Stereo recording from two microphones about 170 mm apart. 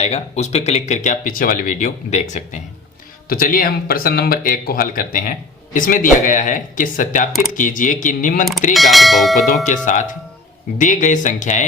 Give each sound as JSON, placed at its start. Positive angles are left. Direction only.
{"t": 0.0, "sound": "speech", "side_deg": 40}
{"t": 3.2, "sound": "speech", "side_deg": 60}
{"t": 8.7, "sound": "speech", "side_deg": 0}
{"t": 9.6, "sound": "speech", "side_deg": 45}